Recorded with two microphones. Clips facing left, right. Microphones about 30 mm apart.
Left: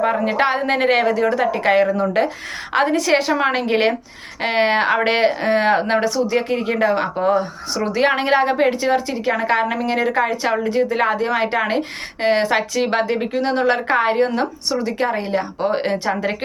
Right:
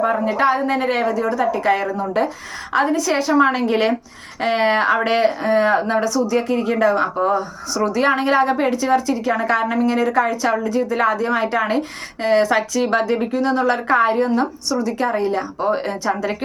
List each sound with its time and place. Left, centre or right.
0.3 s a woman's voice: left
2.7 s a woman's voice: left
3.2 s a woman's voice: left
7.3 s a woman's voice: left